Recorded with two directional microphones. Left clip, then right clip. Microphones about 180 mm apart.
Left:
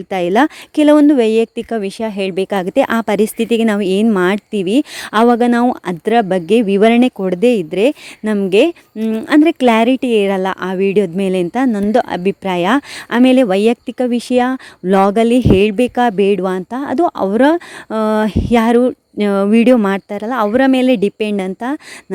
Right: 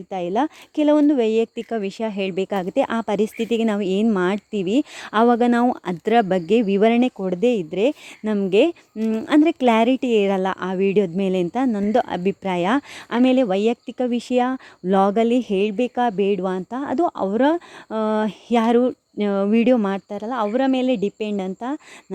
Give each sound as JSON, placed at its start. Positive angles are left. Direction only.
{"t": 0.1, "sound": "speech", "side_deg": 30}